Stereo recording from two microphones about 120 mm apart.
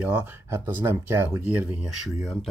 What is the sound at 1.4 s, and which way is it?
Speech, 10° right (ahead or behind).